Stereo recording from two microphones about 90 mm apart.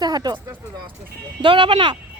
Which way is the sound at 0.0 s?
50° right (ahead or behind).